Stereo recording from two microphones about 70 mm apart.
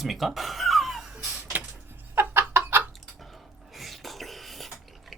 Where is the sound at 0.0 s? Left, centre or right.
Centre.